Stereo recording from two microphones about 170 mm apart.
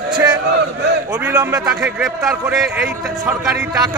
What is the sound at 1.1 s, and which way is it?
A man's voice, 10° right (ahead or behind).